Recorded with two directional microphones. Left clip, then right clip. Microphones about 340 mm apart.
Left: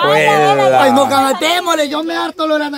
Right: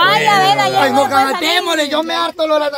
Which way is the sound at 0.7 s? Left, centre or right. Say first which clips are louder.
Left 2 dB; centre.